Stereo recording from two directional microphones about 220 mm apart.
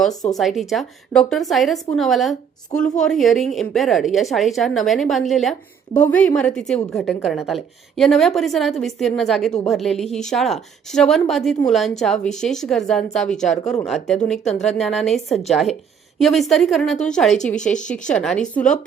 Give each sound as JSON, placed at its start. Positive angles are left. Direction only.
{"t": 0.1, "sound": "speech", "side_deg": 15}
{"t": 0.3, "sound": "a woman's voice", "side_deg": 0}